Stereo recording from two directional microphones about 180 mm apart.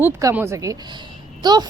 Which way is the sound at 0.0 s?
15° right (ahead or behind).